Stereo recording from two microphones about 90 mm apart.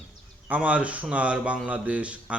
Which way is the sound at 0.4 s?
15° right (ahead or behind).